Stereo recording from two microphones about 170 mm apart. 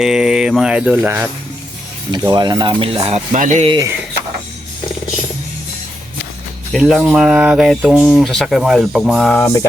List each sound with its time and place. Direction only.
0.0 s speech: 5° right (ahead or behind)
2.1 s speech: 25° right (ahead or behind)
3.3 s speech: 45° right (ahead or behind)
3.7 s speech: 20° right (ahead or behind)
6.7 s speech: centre (ahead or behind)
9.3 s music: 15° left (ahead or behind)